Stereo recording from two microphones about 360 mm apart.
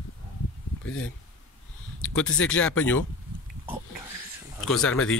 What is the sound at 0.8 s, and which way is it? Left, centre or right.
Speech, left.